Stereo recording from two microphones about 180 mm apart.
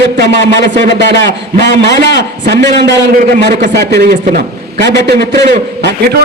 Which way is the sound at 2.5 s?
70° right (ahead or behind).